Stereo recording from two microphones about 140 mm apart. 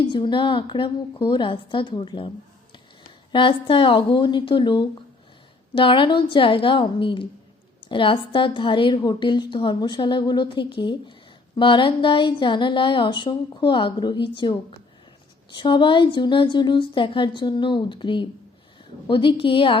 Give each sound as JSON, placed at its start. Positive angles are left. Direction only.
{"t": 0.0, "sound": "a woman's voice", "side_deg": 35}
{"t": 3.3, "sound": "a woman's voice", "side_deg": 35}